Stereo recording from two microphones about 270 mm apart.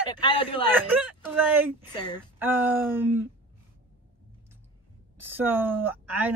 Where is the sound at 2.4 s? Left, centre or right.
Centre.